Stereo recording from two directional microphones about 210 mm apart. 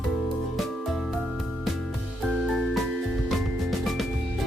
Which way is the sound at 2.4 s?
Centre (ahead or behind).